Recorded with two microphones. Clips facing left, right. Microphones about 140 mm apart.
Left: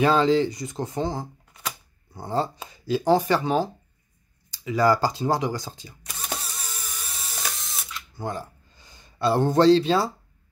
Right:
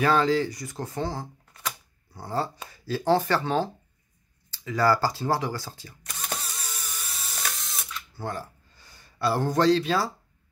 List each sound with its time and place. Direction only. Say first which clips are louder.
0.0 s speech: left 3 dB; 20° left (ahead or behind)
6.0 s camera: left 1 dB; centre (ahead or behind)
8.2 s speech: left 2 dB; 20° left (ahead or behind)